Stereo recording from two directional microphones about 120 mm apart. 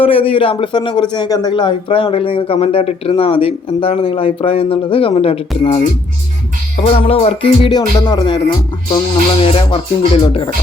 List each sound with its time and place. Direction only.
0.0 s speech: 50° left (ahead or behind)
6.8 s speech: 50° left (ahead or behind)
9.4 s speech: 50° left (ahead or behind)